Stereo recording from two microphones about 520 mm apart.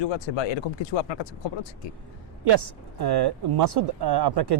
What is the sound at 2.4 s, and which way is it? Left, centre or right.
Speech, right.